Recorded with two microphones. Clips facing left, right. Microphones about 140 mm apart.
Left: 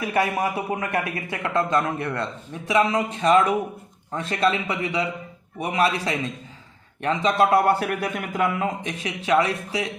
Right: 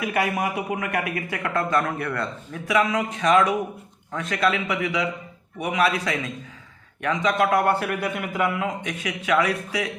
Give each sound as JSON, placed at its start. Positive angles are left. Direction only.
{"t": 0.0, "sound": "a man's voice", "side_deg": 30}
{"t": 7.9, "sound": "a man's voice", "side_deg": 45}